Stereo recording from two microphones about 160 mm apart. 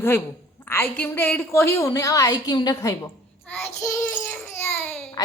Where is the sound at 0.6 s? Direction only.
10° left (ahead or behind).